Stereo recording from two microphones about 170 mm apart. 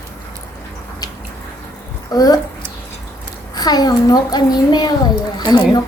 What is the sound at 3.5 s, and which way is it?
A child's voice, 25° left (ahead or behind).